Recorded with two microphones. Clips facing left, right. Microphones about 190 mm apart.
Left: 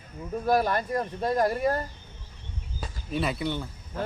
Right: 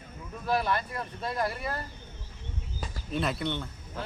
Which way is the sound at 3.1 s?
5° left (ahead or behind).